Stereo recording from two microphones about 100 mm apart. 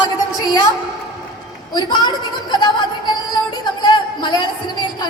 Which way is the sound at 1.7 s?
45° left (ahead or behind).